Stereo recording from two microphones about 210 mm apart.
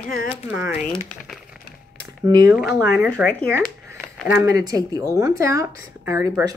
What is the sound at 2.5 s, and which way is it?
Speech, 5° right (ahead or behind).